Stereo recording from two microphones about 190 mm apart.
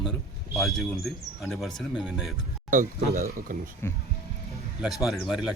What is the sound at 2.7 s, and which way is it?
Speech, 45° right (ahead or behind).